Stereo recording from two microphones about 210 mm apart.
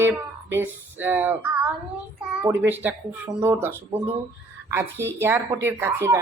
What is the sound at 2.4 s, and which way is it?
Speech, 10° right (ahead or behind).